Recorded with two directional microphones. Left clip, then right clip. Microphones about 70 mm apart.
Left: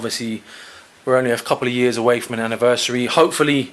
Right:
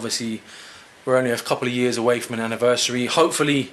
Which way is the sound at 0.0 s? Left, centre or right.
Left.